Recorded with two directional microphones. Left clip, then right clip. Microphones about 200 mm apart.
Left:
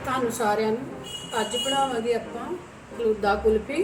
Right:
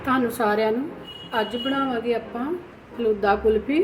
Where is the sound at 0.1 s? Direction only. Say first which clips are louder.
Right 3 dB; 40° right (ahead or behind).